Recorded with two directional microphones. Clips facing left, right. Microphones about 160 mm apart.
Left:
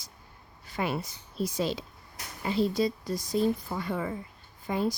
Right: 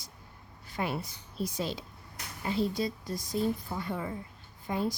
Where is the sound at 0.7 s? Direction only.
90° left.